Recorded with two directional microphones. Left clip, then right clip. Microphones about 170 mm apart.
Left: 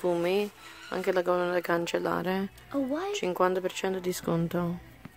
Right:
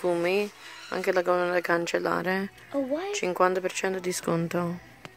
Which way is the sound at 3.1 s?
5° left (ahead or behind).